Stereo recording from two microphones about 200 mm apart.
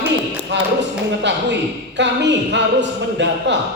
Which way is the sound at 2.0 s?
60° right (ahead or behind).